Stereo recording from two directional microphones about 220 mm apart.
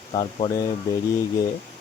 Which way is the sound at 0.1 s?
25° left (ahead or behind).